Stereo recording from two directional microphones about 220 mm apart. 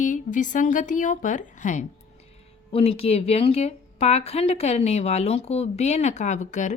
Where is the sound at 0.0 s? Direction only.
35° left (ahead or behind).